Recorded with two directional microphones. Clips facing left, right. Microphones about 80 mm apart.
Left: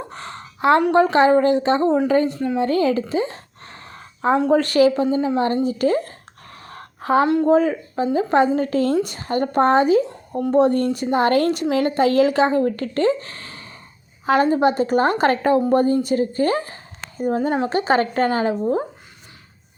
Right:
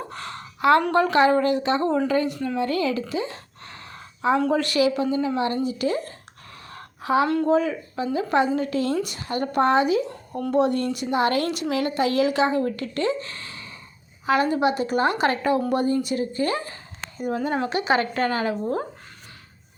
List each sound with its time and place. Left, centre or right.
0.1 s a sound: left
0.9 s a woman's voice: left
2.6 s a sound: left
4.5 s a woman's voice: left
5.0 s a woman's voice: left
5.6 s a sound: left
7.4 s a woman's voice: left
10.3 s a woman's voice: left
10.6 s a woman's voice: left; by 18.9 s centre